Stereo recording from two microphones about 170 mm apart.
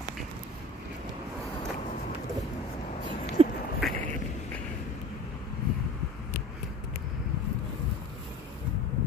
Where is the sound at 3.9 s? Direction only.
10° left (ahead or behind).